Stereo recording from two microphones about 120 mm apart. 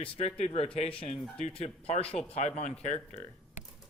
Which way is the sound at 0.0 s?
55° left (ahead or behind).